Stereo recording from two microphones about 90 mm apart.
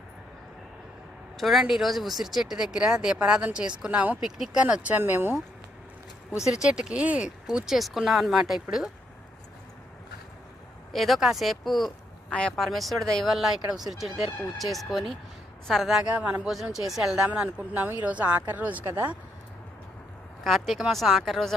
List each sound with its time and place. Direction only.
1.4 s speech: centre (ahead or behind)
4.2 s speech: 5° right (ahead or behind)
4.6 s speech: 15° right (ahead or behind)
6.5 s speech: 5° right (ahead or behind)
10.9 s speech: centre (ahead or behind)
16.0 s speech: 15° right (ahead or behind)
16.5 s speech: 5° right (ahead or behind); by 19.1 s 20° right (ahead or behind)
20.4 s speech: centre (ahead or behind)